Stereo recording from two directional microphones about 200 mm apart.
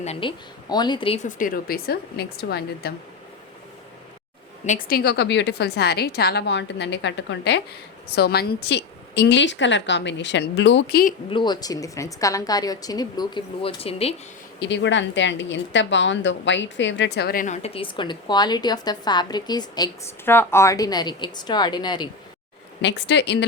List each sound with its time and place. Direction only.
0.0 s speech: 30° left (ahead or behind); by 2.9 s 50° left (ahead or behind)
4.6 s a woman's voice: 40° left (ahead or behind)
11.3 s a woman's voice: 25° left (ahead or behind)
14.6 s a woman's voice: 65° left (ahead or behind); by 22.1 s 20° left (ahead or behind)
22.8 s a woman's voice: 60° left (ahead or behind)